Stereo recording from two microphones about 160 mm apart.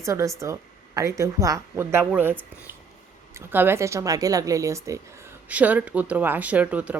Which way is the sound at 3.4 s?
15° right (ahead or behind).